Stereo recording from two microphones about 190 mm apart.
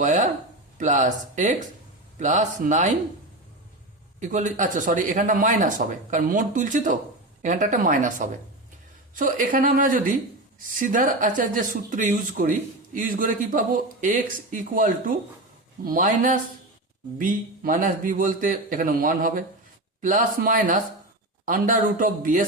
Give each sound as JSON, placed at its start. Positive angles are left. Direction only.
{"t": 0.0, "sound": "speech", "side_deg": -40}
{"t": 4.2, "sound": "speech", "side_deg": -40}